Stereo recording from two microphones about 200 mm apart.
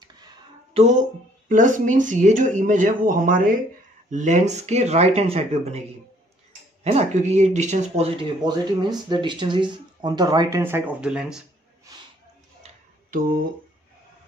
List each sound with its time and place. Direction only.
1.5 s speech: 40° right (ahead or behind)
6.8 s speech: 30° right (ahead or behind); by 11.4 s 5° right (ahead or behind)
12.6 s a sound: 40° right (ahead or behind)